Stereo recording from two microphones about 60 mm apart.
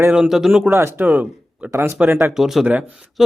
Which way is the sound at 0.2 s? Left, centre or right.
Centre.